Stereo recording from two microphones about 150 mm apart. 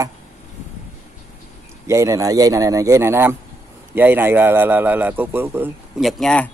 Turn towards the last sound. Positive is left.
turn(degrees=5)  # may be behind; listen again after turning